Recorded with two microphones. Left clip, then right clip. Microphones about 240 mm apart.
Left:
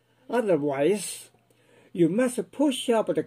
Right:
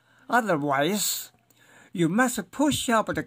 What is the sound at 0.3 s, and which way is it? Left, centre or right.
Speech, right.